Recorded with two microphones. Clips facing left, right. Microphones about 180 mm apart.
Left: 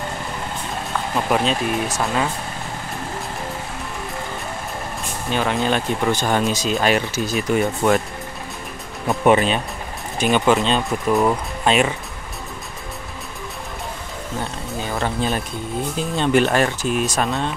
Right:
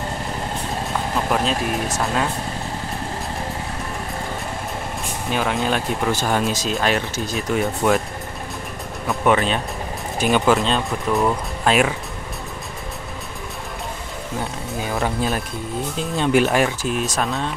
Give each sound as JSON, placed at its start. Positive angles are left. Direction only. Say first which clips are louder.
{"t": 1.3, "sound": "speech", "louder": "left 3 dB", "side_deg": 0}
{"t": 5.3, "sound": "speech", "louder": "left 1 dB", "side_deg": 0}
{"t": 9.2, "sound": "speech", "louder": "left 3 dB", "side_deg": 20}
{"t": 10.2, "sound": "speech", "louder": "even", "side_deg": 0}
{"t": 11.1, "sound": "speech", "louder": "left 2 dB", "side_deg": 10}
{"t": 11.6, "sound": "speech", "louder": "even", "side_deg": -5}
{"t": 14.4, "sound": "speech", "louder": "right 1 dB", "side_deg": -5}